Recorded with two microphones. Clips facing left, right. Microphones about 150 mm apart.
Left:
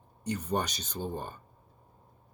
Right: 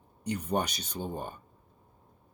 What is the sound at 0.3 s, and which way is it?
Speech, 10° right (ahead or behind).